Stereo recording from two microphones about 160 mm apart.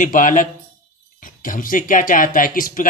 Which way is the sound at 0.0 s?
55° left (ahead or behind).